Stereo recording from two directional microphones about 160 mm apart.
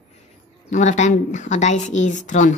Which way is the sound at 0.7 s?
50° left (ahead or behind).